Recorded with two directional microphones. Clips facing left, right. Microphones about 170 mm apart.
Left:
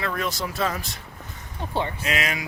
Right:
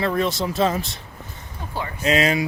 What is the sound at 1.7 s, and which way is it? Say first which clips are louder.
Speech: left 3 dB; 30° left (ahead or behind).